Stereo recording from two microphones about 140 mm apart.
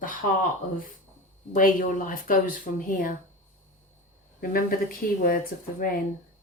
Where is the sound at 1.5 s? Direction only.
75° left (ahead or behind).